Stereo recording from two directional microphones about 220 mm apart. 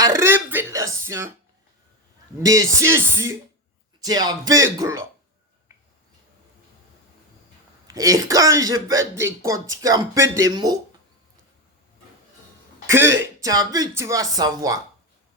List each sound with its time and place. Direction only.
0.2 s a sound: 10° right (ahead or behind)
1.0 s speech: 10° right (ahead or behind)
2.5 s speech: 15° right (ahead or behind)
7.9 s speech: 15° right (ahead or behind)
12.9 s speech: 10° right (ahead or behind)